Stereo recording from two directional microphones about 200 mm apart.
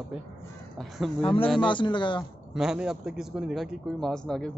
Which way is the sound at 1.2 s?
25° left (ahead or behind).